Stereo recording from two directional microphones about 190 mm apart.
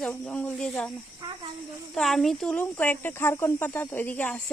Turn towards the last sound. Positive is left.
turn(degrees=10)  # may be behind; listen again after turning